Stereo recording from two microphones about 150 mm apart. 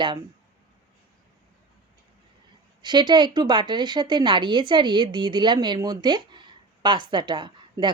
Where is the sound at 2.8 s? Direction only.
30° right (ahead or behind).